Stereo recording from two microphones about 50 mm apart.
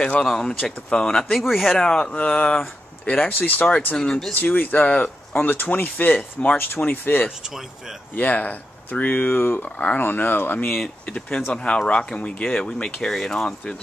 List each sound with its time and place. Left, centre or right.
0.2 s speech: centre
1.4 s speech: centre
1.8 s speech: centre
3.2 s speech: left
3.8 s speech: left
4.3 s speech: left
5.4 s speech: left
11.1 s speech: left